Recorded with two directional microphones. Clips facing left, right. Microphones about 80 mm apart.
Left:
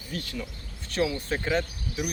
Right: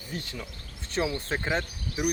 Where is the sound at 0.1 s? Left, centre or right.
Right.